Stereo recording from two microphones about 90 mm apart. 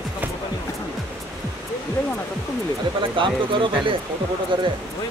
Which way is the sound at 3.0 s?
70° right (ahead or behind).